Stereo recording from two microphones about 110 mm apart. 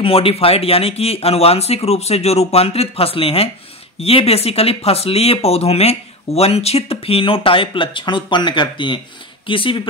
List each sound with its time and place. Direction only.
0.0 s speech: 60° left (ahead or behind)